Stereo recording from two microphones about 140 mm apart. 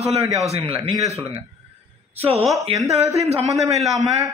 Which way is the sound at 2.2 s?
45° right (ahead or behind).